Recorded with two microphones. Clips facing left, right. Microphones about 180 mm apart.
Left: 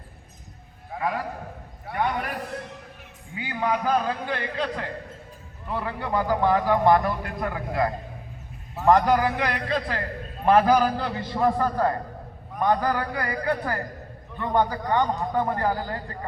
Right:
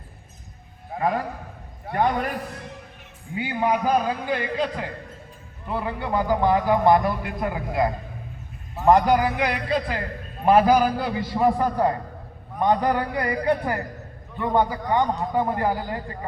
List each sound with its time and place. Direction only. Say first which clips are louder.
0.9 s a man's voice: right 4 dB; 35° right (ahead or behind)
3.3 s a man's voice: right 3 dB; 20° right (ahead or behind)